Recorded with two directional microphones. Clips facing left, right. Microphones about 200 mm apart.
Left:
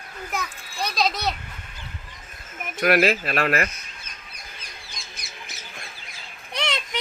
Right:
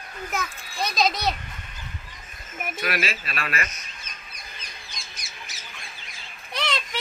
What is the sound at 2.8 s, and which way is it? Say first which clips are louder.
Speech: left 10 dB; 55° left (ahead or behind).